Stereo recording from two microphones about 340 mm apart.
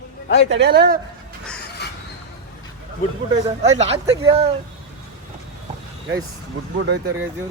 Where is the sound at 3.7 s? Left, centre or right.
Centre.